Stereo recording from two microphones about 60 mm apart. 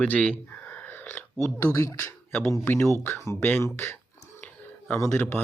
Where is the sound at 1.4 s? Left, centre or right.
Left.